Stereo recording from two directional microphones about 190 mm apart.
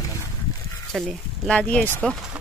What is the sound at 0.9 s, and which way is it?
Speech, 5° left (ahead or behind).